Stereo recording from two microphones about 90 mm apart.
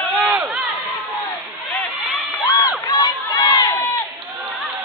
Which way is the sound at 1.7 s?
20° left (ahead or behind).